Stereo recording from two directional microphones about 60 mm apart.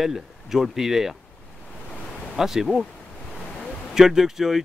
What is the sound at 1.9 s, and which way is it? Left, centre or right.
Waves, centre.